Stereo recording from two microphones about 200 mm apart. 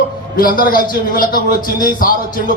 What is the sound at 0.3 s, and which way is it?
A man's voice, 45° left (ahead or behind).